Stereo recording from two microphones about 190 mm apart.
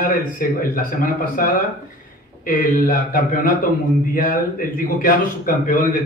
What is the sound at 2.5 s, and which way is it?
A man's voice, 45° left (ahead or behind).